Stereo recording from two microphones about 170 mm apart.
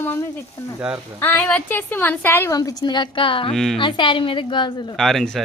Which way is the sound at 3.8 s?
30° left (ahead or behind).